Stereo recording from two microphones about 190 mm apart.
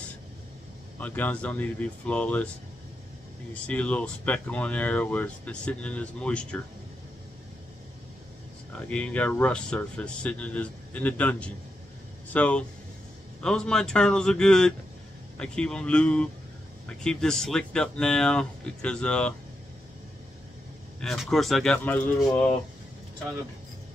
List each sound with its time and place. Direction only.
0.9 s speech: 10° left (ahead or behind)
3.6 s speech: 5° left (ahead or behind)
8.8 s speech: 5° left (ahead or behind)
21.0 s speech: centre (ahead or behind)